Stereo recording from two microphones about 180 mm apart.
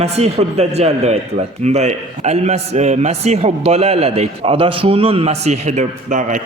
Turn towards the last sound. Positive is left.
turn(degrees=-45)  # may be behind; listen again after turning